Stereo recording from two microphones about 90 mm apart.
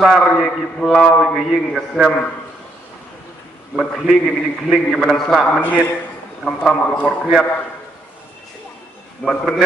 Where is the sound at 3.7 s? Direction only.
5° right (ahead or behind).